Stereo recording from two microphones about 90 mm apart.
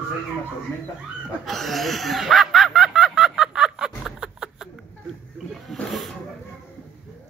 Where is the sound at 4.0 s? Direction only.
5° right (ahead or behind).